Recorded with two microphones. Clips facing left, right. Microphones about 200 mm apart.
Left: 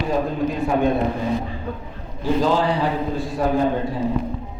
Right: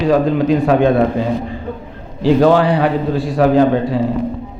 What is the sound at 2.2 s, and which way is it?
A man's voice, 65° right (ahead or behind).